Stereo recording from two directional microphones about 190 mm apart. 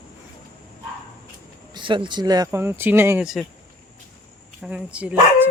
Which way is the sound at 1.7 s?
25° right (ahead or behind).